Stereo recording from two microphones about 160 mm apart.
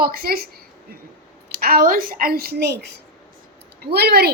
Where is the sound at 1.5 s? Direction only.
70° right (ahead or behind); by 2.9 s 90° right.